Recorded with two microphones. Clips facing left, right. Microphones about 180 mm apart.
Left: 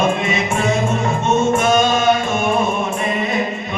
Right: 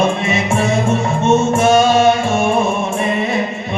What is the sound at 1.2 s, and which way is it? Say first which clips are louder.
Music: right 3 dB; 25° right (ahead or behind).